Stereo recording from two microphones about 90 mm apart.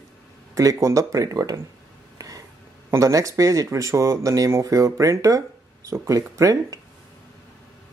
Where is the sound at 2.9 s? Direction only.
35° right (ahead or behind).